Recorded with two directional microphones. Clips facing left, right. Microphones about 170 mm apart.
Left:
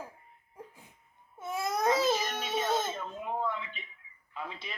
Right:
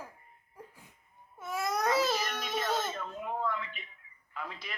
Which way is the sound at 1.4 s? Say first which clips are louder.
Left 1 dB; 25° left (ahead or behind).